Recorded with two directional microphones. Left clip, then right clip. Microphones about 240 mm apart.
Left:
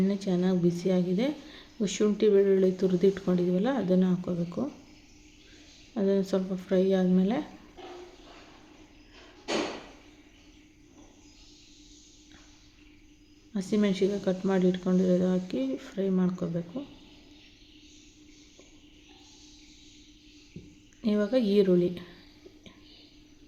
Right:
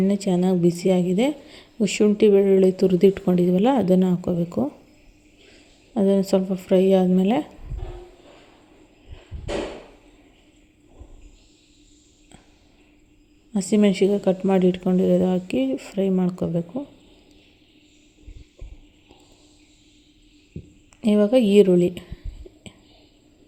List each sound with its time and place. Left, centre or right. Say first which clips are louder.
0.1 s a woman's voice: right 7 dB; right
5.9 s a woman's voice: right 7 dB; right
13.5 s a woman's voice: right 8 dB; right
21.0 s a woman's voice: right 9 dB; right